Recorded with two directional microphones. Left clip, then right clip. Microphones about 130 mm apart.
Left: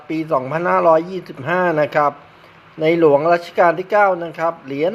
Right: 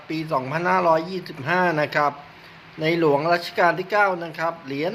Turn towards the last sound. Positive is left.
turn(degrees=50)  # may be behind; listen again after turning